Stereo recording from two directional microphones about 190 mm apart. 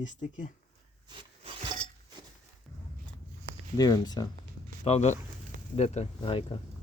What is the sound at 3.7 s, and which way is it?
Speech, 20° left (ahead or behind).